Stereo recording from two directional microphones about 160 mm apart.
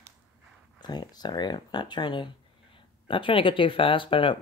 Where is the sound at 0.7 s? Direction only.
25° left (ahead or behind).